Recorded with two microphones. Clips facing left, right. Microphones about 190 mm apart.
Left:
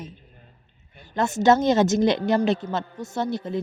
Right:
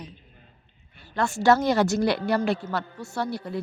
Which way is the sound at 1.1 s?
20° left (ahead or behind).